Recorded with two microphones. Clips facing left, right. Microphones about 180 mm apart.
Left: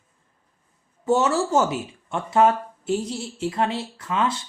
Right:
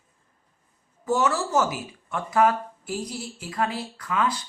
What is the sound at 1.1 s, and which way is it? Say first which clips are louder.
Speech: left 3 dB; 25° left (ahead or behind).